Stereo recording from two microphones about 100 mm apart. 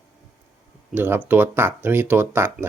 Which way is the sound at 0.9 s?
20° right (ahead or behind).